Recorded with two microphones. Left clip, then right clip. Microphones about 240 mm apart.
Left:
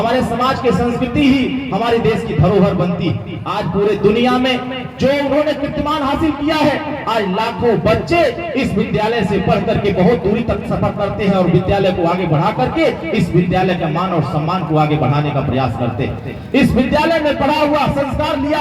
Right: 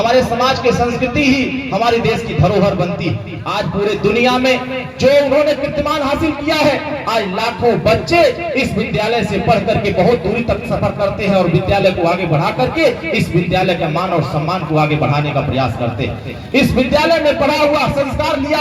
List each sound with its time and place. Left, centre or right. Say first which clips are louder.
0.3 s a man's voice: right 2 dB; left